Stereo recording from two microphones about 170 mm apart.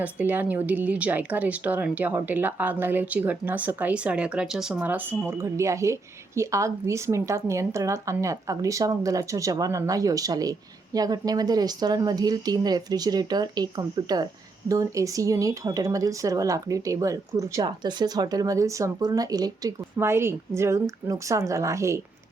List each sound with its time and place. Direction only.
0.0 s speech: 10° right (ahead or behind)